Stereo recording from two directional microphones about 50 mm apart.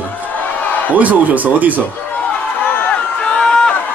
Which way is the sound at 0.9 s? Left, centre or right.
Right.